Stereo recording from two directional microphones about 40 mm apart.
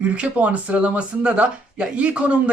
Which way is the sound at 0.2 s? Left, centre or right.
Right.